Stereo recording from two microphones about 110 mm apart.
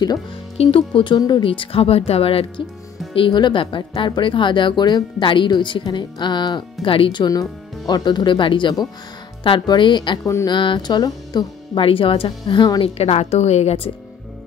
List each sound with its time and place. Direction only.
0.6 s speech: 55° left (ahead or behind)
3.2 s speech: 45° left (ahead or behind)
10.2 s speech: 30° left (ahead or behind)
10.5 s speech: 45° left (ahead or behind)
11.8 s speech: 55° left (ahead or behind)
12.8 s a woman's voice: 70° left (ahead or behind)